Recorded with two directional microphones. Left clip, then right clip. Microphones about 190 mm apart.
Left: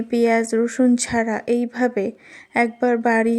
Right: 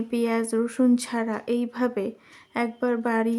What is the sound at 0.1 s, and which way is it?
A woman's voice, 20° left (ahead or behind).